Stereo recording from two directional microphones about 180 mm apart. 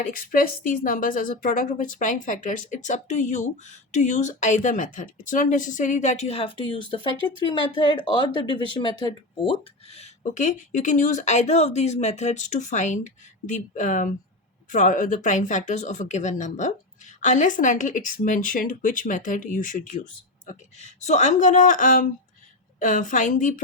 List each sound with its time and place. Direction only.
0.0 s speech: 50° left (ahead or behind)